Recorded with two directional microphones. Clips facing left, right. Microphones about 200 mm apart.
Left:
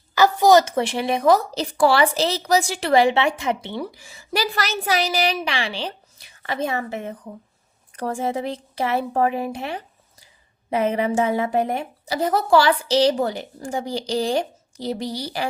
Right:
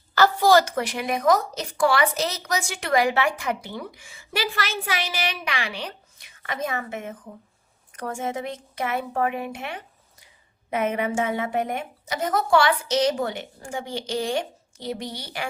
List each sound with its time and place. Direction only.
0.1 s a woman's voice: 15° left (ahead or behind); by 15.4 s 35° left (ahead or behind)